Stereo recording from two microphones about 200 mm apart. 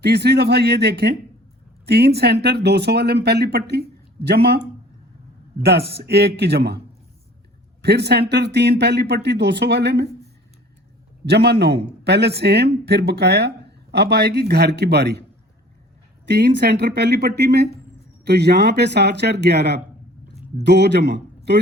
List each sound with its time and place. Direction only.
0.0 s speech: 55° right (ahead or behind)
5.6 s speech: 55° right (ahead or behind)
11.3 s speech: 55° right (ahead or behind)
16.2 s speech: 55° right (ahead or behind)